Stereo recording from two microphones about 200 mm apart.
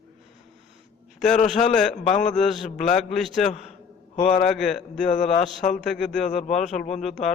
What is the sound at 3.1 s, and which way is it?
A man's voice, centre (ahead or behind).